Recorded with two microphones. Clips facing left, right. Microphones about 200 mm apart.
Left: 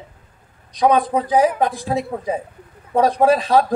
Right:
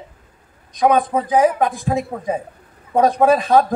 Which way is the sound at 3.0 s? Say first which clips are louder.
Right 1 dB; 50° right (ahead or behind).